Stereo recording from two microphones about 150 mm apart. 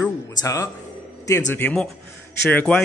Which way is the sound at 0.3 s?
25° left (ahead or behind).